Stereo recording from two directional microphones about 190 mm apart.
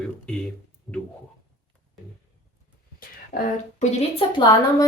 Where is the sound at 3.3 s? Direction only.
35° left (ahead or behind).